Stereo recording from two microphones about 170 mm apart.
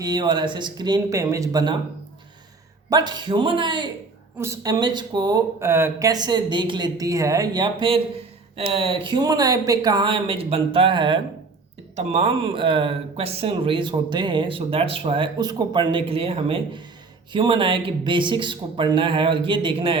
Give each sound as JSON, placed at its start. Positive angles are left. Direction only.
{"t": 0.0, "sound": "speech", "side_deg": -25}
{"t": 2.9, "sound": "speech", "side_deg": -25}
{"t": 4.4, "sound": "speech", "side_deg": -15}